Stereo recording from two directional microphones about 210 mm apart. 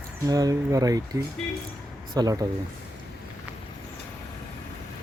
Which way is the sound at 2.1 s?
15° right (ahead or behind).